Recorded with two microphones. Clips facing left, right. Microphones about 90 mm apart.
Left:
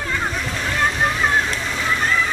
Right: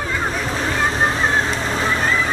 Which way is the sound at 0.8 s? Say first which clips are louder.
Even; 35° right (ahead or behind).